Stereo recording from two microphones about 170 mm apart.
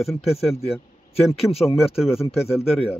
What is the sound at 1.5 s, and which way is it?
Speech, 35° left (ahead or behind).